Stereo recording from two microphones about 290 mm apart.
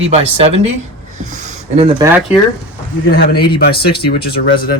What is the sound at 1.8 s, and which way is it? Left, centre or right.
Speech, centre.